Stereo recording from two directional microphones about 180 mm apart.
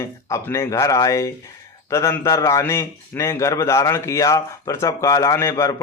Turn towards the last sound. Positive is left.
turn(degrees=15)  # may be behind; listen again after turning